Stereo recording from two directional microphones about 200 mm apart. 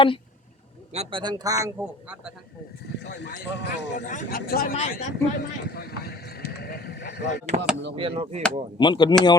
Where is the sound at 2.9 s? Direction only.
60° left (ahead or behind).